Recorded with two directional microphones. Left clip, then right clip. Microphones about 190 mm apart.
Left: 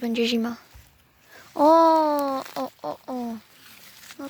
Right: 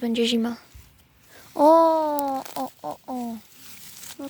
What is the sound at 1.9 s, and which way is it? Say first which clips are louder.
Speech: left 2 dB; 20° left (ahead or behind).